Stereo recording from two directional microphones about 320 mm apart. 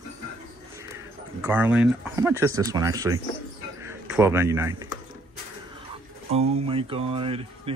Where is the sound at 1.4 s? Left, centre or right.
Centre.